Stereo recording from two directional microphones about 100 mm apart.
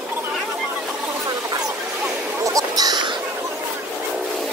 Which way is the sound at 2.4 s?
35° right (ahead or behind).